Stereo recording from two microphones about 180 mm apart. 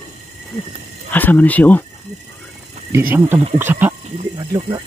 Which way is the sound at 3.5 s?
10° right (ahead or behind).